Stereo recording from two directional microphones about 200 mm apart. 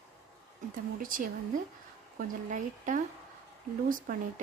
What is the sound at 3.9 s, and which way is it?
Speech, 40° right (ahead or behind).